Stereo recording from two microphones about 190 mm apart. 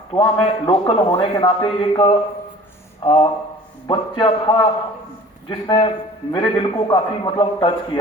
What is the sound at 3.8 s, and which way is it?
A man's voice, 25° left (ahead or behind).